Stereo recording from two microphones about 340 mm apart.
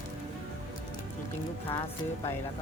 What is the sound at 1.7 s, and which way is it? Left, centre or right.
Speech, centre.